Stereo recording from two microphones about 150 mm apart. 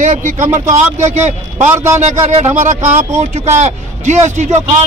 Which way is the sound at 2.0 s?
45° right (ahead or behind).